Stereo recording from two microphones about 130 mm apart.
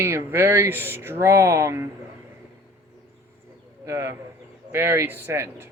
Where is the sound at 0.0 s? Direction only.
15° right (ahead or behind).